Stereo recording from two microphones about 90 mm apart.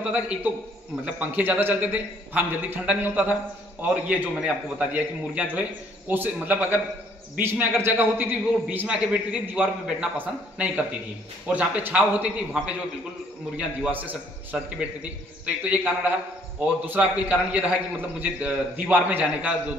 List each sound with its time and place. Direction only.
0.1 s a man's voice: 15° right (ahead or behind)
8.8 s a man's voice: 10° right (ahead or behind)